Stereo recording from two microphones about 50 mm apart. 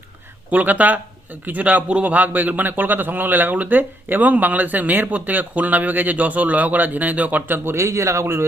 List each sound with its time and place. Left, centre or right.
0.5 s speech: right
7.8 s speech: right